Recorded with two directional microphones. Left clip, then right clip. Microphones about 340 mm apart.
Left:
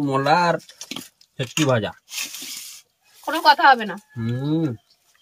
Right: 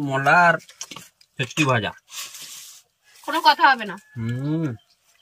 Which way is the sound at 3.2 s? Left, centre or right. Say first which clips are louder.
Left 2 dB; centre.